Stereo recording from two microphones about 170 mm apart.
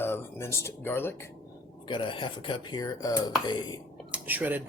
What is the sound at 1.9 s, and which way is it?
Speech, 30° left (ahead or behind).